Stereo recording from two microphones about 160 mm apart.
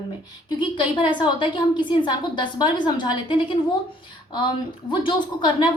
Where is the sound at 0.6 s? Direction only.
30° left (ahead or behind).